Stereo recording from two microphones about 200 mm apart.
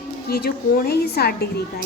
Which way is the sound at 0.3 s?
50° left (ahead or behind).